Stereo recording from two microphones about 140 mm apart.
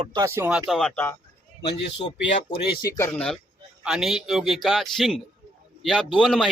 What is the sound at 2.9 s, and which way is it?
Speech, 20° left (ahead or behind).